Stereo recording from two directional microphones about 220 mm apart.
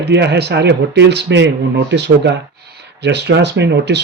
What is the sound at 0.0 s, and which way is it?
Speech, 50° right (ahead or behind).